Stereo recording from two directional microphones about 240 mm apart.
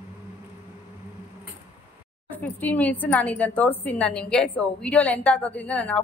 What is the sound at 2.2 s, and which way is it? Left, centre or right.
A woman's voice, centre.